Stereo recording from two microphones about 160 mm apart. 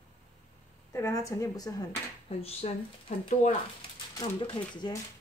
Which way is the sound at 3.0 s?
55° left (ahead or behind).